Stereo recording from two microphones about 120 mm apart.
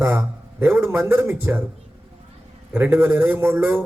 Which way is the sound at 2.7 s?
15° right (ahead or behind).